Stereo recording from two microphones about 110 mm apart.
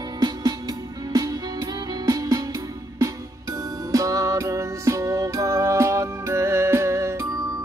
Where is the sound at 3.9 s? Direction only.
30° right (ahead or behind).